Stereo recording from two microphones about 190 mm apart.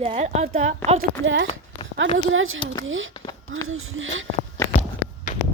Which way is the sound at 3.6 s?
90° right.